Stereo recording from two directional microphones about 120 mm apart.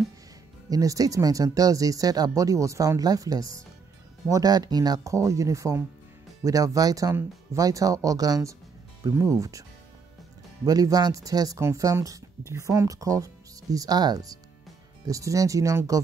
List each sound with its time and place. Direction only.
0.7 s speech: 30° right (ahead or behind)